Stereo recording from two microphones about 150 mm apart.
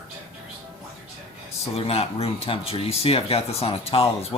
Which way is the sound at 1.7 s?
40° left (ahead or behind).